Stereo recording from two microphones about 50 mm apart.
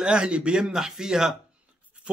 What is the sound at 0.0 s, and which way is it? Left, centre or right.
Speech, right.